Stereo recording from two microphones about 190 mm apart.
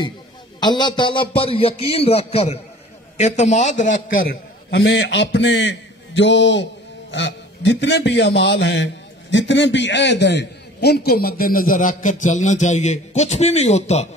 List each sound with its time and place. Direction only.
0.6 s a man's voice: 25° left (ahead or behind)